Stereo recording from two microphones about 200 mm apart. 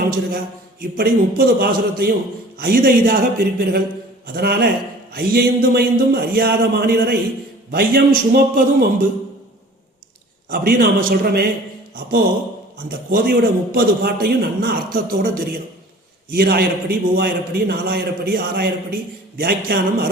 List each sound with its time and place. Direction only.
0.8 s a man's voice: 50° right (ahead or behind)
10.5 s a man's voice: 50° right (ahead or behind)
12.9 s a man's voice: 50° right (ahead or behind)